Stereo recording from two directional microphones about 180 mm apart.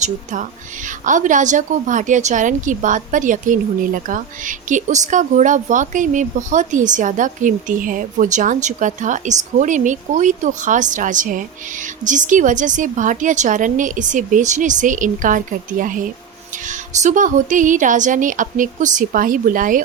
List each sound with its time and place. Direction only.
1.0 s a woman's voice: 45° right (ahead or behind)